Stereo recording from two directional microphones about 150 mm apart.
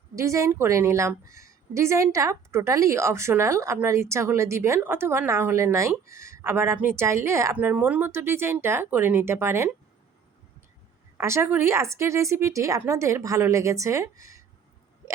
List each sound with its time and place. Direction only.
0.2 s a woman's voice: 20° right (ahead or behind)
11.2 s speech: 20° right (ahead or behind)